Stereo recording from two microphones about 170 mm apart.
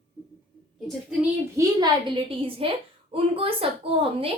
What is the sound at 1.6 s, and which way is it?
A woman's voice, 25° right (ahead or behind).